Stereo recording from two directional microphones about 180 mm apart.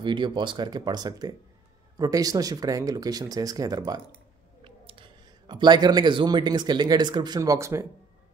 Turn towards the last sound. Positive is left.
turn(degrees=-15)  # may be behind; listen again after turning